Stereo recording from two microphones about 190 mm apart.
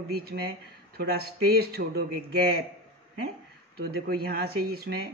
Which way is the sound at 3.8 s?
55° right (ahead or behind).